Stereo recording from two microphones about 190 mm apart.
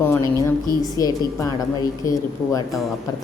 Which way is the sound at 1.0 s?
20° left (ahead or behind).